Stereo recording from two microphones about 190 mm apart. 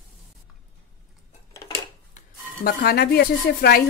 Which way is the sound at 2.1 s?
50° left (ahead or behind).